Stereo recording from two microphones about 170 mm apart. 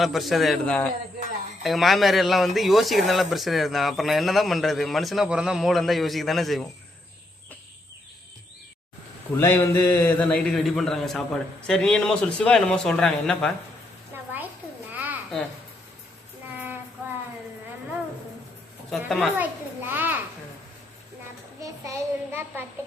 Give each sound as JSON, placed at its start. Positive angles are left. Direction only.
{"t": 0.0, "sound": "speech", "side_deg": 0}
{"t": 9.4, "sound": "a man's voice", "side_deg": 15}
{"t": 14.1, "sound": "a sound", "side_deg": -15}
{"t": 14.9, "sound": "babbling", "side_deg": -10}
{"t": 18.9, "sound": "speech", "side_deg": 0}
{"t": 19.4, "sound": "a sound", "side_deg": -10}
{"t": 21.6, "sound": "a child's voice", "side_deg": -20}